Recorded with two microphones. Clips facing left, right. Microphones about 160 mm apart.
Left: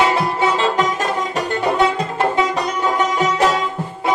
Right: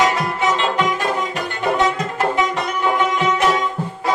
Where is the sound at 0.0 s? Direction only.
30° left (ahead or behind).